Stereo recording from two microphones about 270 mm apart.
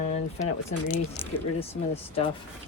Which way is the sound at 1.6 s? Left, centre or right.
Left.